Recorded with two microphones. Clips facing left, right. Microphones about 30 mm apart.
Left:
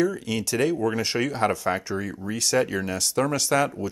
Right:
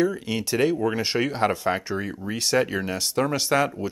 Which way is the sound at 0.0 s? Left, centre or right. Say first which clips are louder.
Even; centre.